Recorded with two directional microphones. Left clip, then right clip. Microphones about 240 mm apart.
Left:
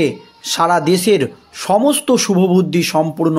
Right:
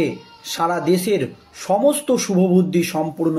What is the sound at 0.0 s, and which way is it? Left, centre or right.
Speech, left.